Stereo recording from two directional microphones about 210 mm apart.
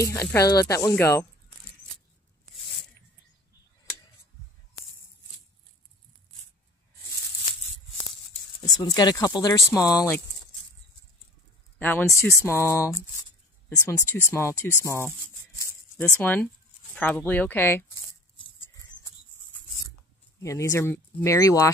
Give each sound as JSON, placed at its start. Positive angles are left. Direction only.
{"t": 0.0, "sound": "speech", "side_deg": 15}
{"t": 8.5, "sound": "speech", "side_deg": 20}
{"t": 11.8, "sound": "speech", "side_deg": 10}
{"t": 16.2, "sound": "speech", "side_deg": 5}
{"t": 20.4, "sound": "speech", "side_deg": 15}